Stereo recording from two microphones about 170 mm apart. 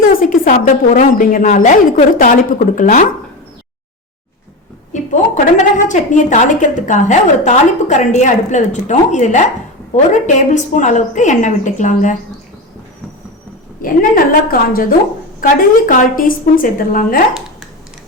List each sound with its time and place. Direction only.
0.1 s a woman's voice: 55° left (ahead or behind)
4.9 s a woman's voice: 45° left (ahead or behind)
13.8 s a woman's voice: 55° left (ahead or behind)